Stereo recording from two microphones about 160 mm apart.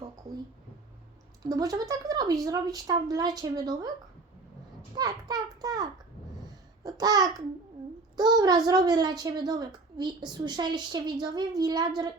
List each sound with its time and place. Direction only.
1.5 s a woman's voice: 20° right (ahead or behind)
4.9 s a sound: 25° right (ahead or behind)
6.8 s babbling: 25° right (ahead or behind)
8.1 s a woman's voice: 25° right (ahead or behind)